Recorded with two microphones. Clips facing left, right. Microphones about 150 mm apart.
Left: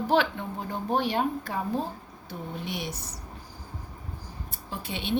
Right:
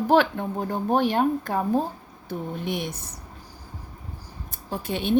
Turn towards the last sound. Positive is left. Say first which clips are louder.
# right 6 dB
turn(degrees=-45)  # may be behind; listen again after turning